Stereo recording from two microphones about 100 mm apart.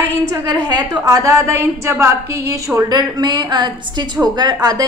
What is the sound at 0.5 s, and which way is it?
Speech, 45° right (ahead or behind).